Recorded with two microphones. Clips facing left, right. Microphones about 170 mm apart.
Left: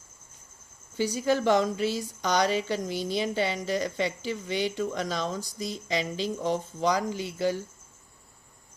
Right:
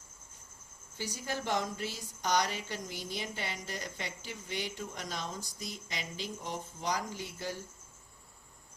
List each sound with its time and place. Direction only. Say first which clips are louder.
0.9 s speech: left 13 dB; 80° left